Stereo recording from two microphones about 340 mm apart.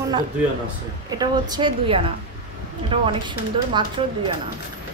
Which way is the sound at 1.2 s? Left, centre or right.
Centre.